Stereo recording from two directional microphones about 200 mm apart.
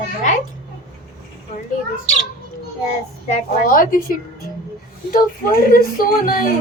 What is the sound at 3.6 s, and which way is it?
Speech, 45° left (ahead or behind).